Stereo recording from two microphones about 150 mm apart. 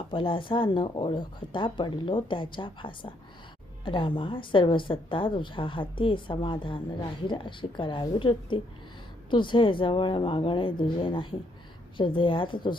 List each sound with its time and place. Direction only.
0.1 s speech: 35° left (ahead or behind)